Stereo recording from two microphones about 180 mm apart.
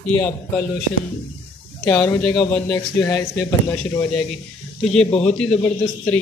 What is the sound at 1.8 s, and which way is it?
Speech, 15° left (ahead or behind).